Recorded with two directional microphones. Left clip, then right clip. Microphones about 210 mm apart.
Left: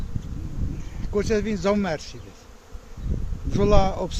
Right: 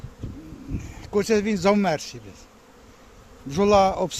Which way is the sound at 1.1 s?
50° right (ahead or behind).